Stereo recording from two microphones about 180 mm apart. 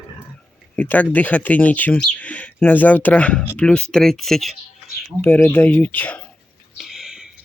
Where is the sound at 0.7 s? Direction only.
10° left (ahead or behind).